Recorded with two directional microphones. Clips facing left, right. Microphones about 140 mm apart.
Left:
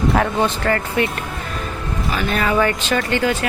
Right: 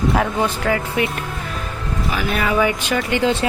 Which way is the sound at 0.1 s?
5° right (ahead or behind).